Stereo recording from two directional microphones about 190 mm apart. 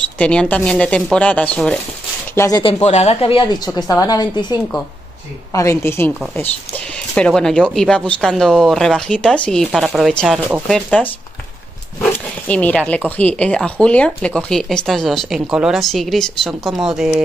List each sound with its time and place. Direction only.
0.2 s speech: 5° left (ahead or behind)
2.3 s speech: 15° left (ahead or behind)
2.6 s a woman's voice: 35° left (ahead or behind); by 6.1 s 15° left (ahead or behind)
7.2 s speech: 5° left (ahead or behind)